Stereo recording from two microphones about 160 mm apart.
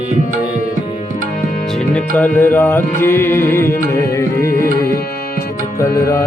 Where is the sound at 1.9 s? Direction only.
10° left (ahead or behind).